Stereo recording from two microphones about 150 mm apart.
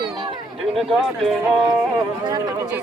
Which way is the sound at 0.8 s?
Centre (ahead or behind).